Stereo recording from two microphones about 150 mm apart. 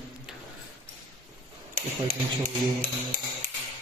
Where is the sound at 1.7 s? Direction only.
70° right (ahead or behind).